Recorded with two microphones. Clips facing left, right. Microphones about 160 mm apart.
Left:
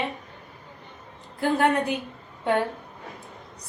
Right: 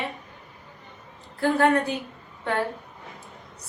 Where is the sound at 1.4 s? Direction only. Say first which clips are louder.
Right 1 dB; 15° left (ahead or behind).